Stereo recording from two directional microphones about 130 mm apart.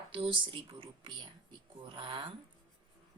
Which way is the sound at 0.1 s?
40° right (ahead or behind).